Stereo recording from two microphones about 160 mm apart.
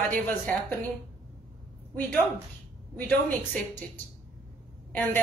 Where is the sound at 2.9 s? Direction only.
10° left (ahead or behind).